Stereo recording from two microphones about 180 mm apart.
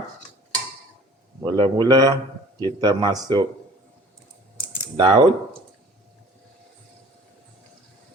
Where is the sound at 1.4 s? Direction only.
25° right (ahead or behind).